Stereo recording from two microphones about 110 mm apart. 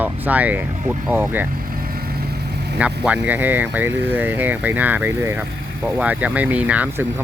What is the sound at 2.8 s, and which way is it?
Speech, 10° right (ahead or behind).